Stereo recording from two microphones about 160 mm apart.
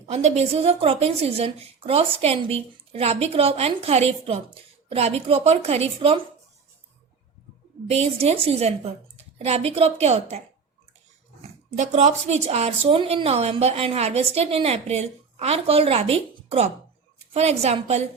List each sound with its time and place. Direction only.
0.1 s speech: 45° right (ahead or behind)
7.9 s speech: 40° right (ahead or behind)
11.8 s speech: 45° right (ahead or behind)